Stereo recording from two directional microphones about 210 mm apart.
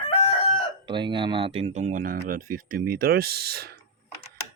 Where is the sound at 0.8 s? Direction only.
20° right (ahead or behind).